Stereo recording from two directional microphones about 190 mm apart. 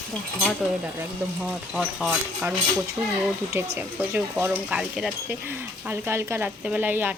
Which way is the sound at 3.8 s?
10° right (ahead or behind).